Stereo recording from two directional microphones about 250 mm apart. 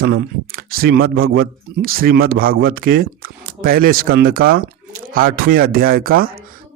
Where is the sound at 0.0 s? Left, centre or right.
Right.